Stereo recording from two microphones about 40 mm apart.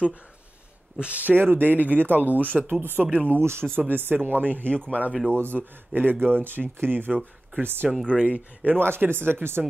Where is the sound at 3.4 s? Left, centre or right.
Right.